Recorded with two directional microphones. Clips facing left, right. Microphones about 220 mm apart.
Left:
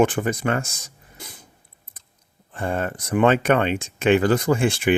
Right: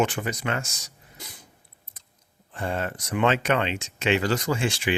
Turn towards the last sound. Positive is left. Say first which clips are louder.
# left 6 dB
turn(degrees=55)  # may be behind; listen again after turning